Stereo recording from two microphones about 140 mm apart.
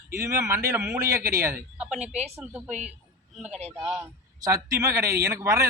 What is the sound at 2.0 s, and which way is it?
Speech, 55° right (ahead or behind).